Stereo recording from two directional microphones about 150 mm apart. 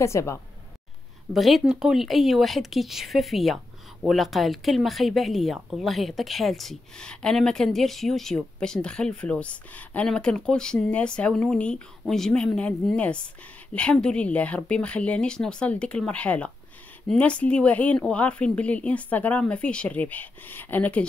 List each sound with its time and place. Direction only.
0.0 s a woman's voice: 20° left (ahead or behind)
1.3 s speech: centre (ahead or behind)